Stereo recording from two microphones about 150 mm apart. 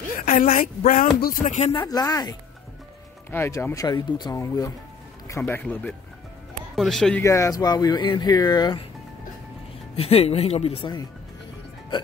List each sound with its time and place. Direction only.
0.2 s speech: 65° left (ahead or behind)
1.7 s speech: 30° left (ahead or behind)
5.5 s speech: 10° left (ahead or behind)
7.2 s speech: 20° left (ahead or behind)
9.9 s speech: 40° left (ahead or behind)